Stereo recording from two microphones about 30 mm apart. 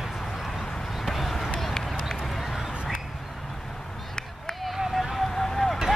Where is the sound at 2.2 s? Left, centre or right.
Centre.